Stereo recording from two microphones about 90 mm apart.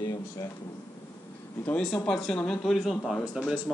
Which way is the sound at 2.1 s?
5° left (ahead or behind).